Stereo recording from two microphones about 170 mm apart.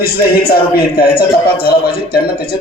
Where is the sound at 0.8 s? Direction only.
65° left (ahead or behind).